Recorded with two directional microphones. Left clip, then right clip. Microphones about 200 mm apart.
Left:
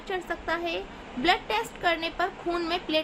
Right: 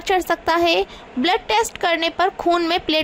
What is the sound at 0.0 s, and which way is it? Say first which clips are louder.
A woman's voice: right 13 dB; 50° right (ahead or behind).